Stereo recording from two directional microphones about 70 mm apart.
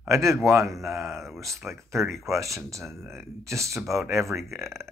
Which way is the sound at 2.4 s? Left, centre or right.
Right.